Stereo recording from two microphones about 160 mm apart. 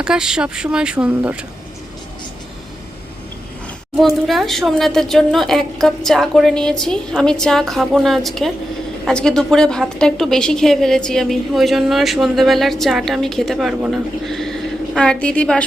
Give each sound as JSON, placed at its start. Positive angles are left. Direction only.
{"t": 0.0, "sound": "a woman's voice", "side_deg": -5}
{"t": 3.9, "sound": "a woman's voice", "side_deg": 0}